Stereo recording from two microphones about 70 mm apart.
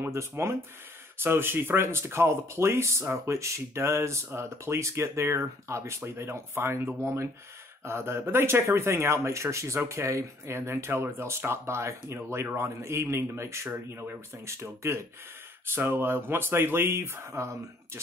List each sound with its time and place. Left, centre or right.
0.0 s speech: right
13.7 s speech: right
14.4 s speech: right